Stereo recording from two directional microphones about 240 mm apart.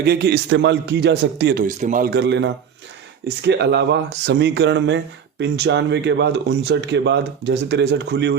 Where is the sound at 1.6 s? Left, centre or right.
Right.